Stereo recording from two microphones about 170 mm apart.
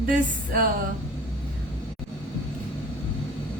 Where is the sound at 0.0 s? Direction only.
55° right (ahead or behind).